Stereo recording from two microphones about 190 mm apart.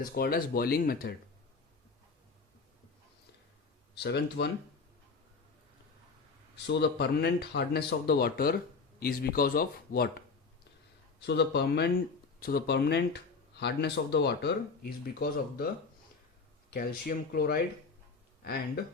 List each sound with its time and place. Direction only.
0.0 s speech: 50° left (ahead or behind)
3.9 s speech: 60° left (ahead or behind)
6.7 s speech: 60° left (ahead or behind)
11.2 s speech: 60° left (ahead or behind)
16.6 s speech: 55° left (ahead or behind)